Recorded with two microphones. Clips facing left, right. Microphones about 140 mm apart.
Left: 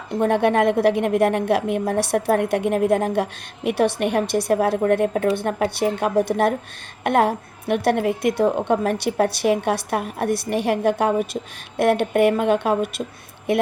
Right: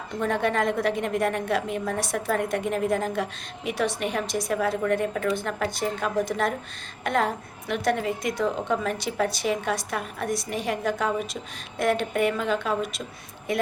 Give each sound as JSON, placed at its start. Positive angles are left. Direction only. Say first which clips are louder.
{"t": 0.2, "sound": "a woman's voice", "louder": "left 7 dB", "side_deg": 60}